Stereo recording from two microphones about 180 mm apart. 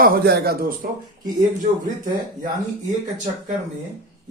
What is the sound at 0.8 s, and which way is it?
Speech, 50° right (ahead or behind).